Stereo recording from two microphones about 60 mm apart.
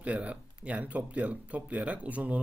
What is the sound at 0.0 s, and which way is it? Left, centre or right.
Speech, right.